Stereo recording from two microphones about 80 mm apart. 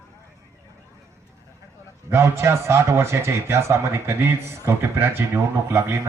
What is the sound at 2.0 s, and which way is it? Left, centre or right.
A man's voice, right.